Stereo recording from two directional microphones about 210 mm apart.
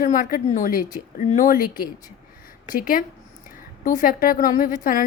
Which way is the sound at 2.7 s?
40° left (ahead or behind).